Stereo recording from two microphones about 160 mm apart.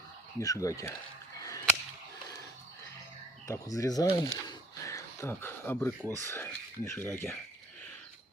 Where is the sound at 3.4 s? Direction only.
20° left (ahead or behind).